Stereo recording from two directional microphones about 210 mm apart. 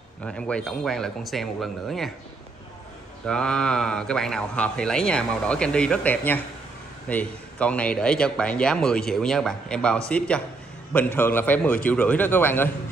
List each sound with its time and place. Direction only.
0.2 s a man's voice: 5° left (ahead or behind)
3.3 s a man's voice: 5° left (ahead or behind)